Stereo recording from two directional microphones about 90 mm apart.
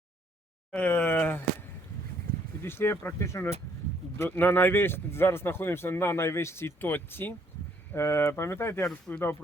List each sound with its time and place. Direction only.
0.7 s speech: 20° left (ahead or behind)
2.6 s speech: 25° left (ahead or behind)
4.2 s speech: 20° left (ahead or behind)